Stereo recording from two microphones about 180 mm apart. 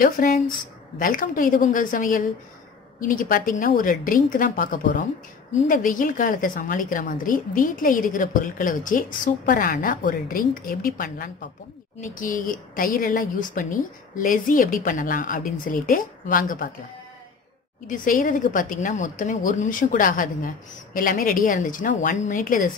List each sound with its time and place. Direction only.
0.0 s a woman's voice: 50° left (ahead or behind)
17.8 s a woman's voice: 45° left (ahead or behind)